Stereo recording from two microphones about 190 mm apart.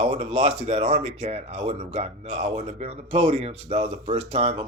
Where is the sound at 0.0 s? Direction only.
35° right (ahead or behind).